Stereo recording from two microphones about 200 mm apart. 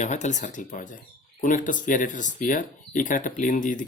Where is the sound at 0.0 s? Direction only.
35° left (ahead or behind).